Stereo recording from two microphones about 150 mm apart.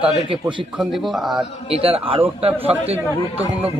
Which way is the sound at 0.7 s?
Centre (ahead or behind).